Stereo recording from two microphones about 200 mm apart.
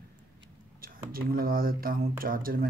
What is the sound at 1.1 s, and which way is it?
Speech, 45° right (ahead or behind).